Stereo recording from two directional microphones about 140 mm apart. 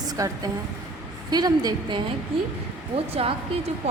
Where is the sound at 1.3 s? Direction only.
30° right (ahead or behind).